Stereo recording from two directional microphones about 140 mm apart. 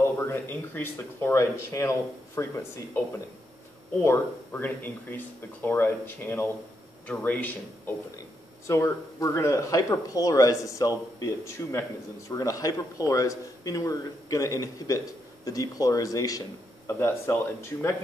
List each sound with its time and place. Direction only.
0.0 s speech: 15° left (ahead or behind)
4.0 s speech: 15° left (ahead or behind)